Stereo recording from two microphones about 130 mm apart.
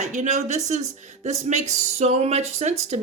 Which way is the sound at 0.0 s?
70° right (ahead or behind).